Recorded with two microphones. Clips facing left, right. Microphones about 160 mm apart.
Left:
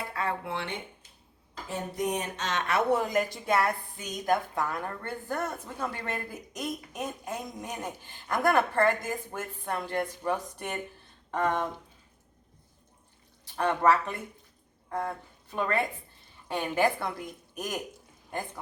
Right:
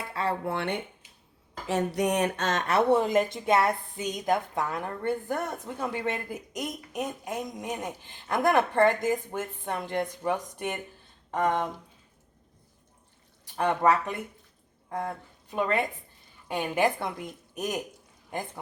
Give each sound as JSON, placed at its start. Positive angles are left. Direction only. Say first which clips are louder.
{"t": 0.1, "sound": "a sound", "louder": "right 4 dB", "side_deg": -30}
{"t": 0.4, "sound": "speech", "louder": "right 5 dB", "side_deg": -55}
{"t": 1.6, "sound": "speech", "louder": "right 5 dB", "side_deg": -85}
{"t": 13.4, "sound": "a woman's voice", "louder": "right 1 dB", "side_deg": -15}